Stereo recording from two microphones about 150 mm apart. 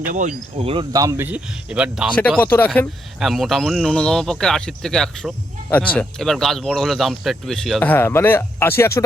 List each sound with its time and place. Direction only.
0.0 s speech: 60° right (ahead or behind)
0.5 s speech: 35° right (ahead or behind)
0.9 s speech: 20° right (ahead or behind)
2.4 s speech: 15° left (ahead or behind)
3.2 s speech: centre (ahead or behind); by 9.0 s 20° left (ahead or behind)